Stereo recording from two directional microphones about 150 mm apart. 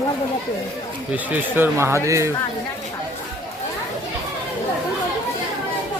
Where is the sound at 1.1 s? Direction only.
10° right (ahead or behind).